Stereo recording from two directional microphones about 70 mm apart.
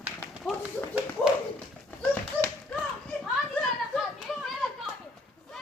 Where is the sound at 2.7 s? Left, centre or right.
Centre.